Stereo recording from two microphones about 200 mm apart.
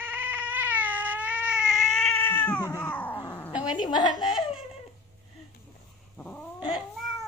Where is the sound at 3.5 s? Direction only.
5° right (ahead or behind).